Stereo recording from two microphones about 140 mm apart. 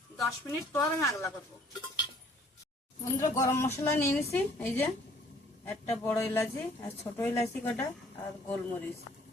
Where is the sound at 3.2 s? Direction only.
20° left (ahead or behind).